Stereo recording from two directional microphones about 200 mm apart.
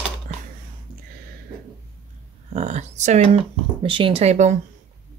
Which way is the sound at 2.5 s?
35° right (ahead or behind).